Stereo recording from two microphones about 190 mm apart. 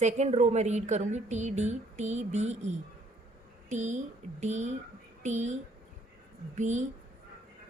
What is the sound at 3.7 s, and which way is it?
A woman's voice, 40° right (ahead or behind).